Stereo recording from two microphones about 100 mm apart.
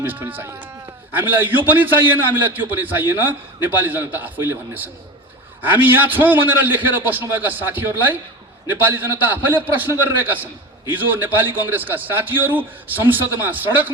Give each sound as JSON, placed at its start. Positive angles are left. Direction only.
{"t": 0.0, "sound": "a man's voice", "side_deg": -20}